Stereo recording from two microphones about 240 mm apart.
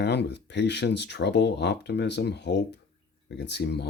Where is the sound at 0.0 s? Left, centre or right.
Left.